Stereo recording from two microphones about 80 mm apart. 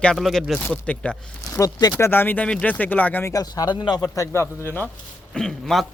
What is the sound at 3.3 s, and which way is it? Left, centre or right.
Speech, left.